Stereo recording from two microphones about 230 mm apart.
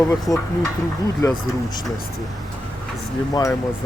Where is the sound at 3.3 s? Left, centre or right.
Centre.